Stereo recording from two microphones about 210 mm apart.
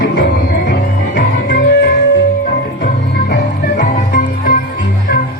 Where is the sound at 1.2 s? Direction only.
45° left (ahead or behind).